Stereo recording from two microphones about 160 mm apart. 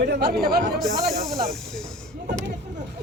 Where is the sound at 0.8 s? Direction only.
Centre (ahead or behind).